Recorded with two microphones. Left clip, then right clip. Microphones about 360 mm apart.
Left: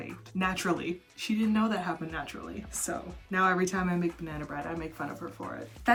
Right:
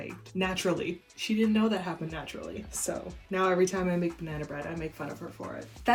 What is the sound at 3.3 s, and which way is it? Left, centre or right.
Speech, centre.